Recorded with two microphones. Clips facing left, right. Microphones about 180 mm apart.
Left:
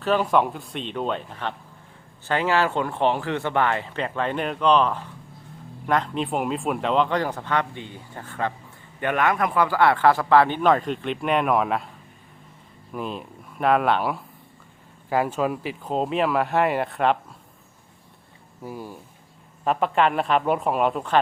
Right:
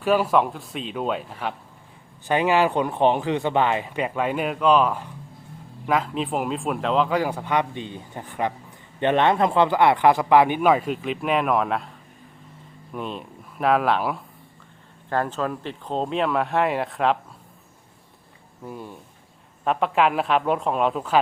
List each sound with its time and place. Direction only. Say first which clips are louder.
0.0 s speech: right 1 dB; 10° right (ahead or behind)
9.0 s speech: right 3 dB; 25° right (ahead or behind); by 17.2 s centre (ahead or behind)
18.6 s speech: left 1 dB; 5° left (ahead or behind)